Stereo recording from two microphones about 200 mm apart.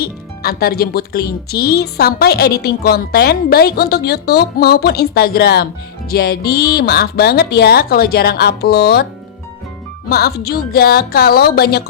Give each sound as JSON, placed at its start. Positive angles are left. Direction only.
{"t": 0.0, "sound": "speech", "side_deg": 50}
{"t": 10.1, "sound": "speech", "side_deg": 50}